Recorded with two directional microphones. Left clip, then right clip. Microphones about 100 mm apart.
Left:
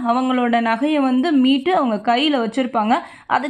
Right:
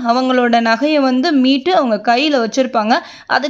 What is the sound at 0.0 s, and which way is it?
A woman's voice, 25° right (ahead or behind).